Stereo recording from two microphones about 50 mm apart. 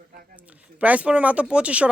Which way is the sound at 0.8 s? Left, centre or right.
Right.